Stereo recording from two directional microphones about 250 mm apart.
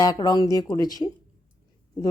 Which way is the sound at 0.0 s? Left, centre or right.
Centre.